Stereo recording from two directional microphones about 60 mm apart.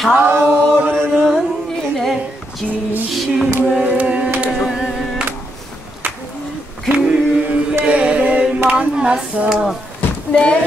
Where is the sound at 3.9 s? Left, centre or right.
Right.